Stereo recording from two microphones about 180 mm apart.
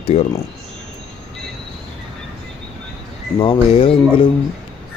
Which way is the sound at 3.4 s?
30° left (ahead or behind).